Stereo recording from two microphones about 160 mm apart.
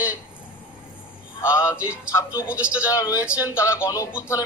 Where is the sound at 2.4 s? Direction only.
10° right (ahead or behind).